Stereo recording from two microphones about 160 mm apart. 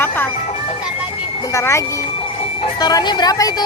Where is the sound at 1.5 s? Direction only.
20° left (ahead or behind).